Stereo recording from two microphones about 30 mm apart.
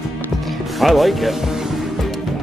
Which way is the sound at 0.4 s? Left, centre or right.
Centre.